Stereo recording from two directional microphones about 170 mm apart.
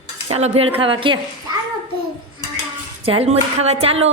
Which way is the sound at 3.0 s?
35° right (ahead or behind).